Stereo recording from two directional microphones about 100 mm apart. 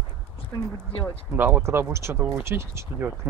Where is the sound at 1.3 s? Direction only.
20° right (ahead or behind).